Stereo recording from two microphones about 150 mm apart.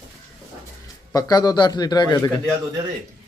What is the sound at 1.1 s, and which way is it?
Speech, 25° left (ahead or behind).